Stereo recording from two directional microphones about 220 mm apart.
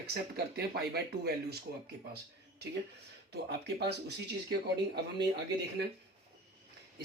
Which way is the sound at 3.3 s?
45° right (ahead or behind).